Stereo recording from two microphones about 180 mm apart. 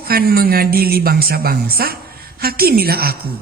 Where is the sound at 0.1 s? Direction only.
55° right (ahead or behind).